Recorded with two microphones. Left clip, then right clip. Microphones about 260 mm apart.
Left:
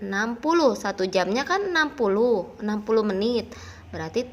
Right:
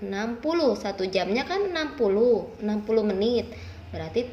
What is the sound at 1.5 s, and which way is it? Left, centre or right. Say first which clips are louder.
A woman's voice: left 4 dB; left.